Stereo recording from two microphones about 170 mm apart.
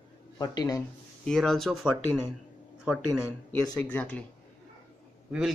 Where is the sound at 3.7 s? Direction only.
10° left (ahead or behind).